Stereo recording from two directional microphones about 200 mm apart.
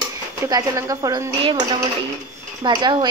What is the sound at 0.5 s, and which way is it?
Speech, 20° right (ahead or behind).